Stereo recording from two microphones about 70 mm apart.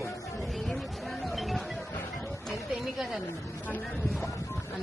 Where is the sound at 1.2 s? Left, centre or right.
Centre.